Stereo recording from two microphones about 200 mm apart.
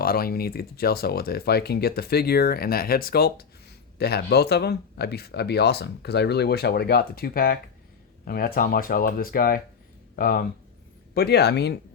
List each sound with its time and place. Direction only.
0.0 s speech: 50° left (ahead or behind)